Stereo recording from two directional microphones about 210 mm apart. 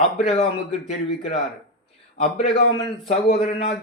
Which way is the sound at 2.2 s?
30° left (ahead or behind).